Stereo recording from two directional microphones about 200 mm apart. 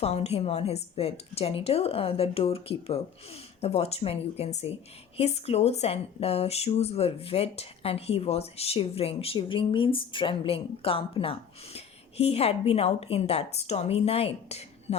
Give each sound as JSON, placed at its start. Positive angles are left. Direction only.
{"t": 0.0, "sound": "speech", "side_deg": 30}